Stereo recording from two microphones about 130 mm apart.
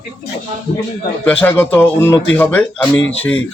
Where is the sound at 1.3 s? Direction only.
15° left (ahead or behind).